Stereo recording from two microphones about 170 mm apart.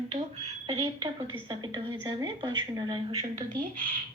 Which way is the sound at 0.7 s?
30° right (ahead or behind).